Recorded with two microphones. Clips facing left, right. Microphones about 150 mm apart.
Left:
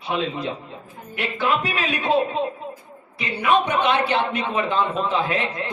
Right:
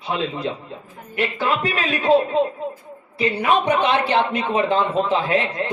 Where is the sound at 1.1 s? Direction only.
35° right (ahead or behind).